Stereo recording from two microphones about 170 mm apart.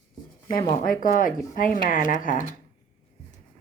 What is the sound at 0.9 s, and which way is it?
Speech, 55° left (ahead or behind).